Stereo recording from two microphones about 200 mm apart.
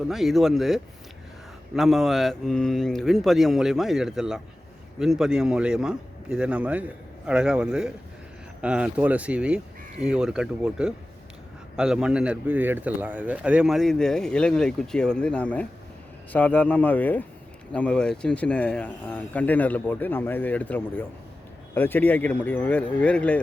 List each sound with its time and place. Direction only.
0.0 s speech: centre (ahead or behind)